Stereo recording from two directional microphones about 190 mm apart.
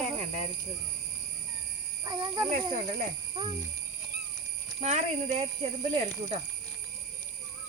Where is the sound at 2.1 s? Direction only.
25° right (ahead or behind).